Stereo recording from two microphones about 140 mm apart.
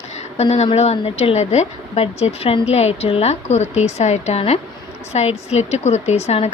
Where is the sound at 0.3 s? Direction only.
50° left (ahead or behind).